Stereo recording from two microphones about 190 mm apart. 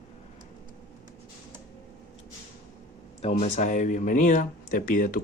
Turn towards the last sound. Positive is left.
turn(degrees=45)  # may be behind; listen again after turning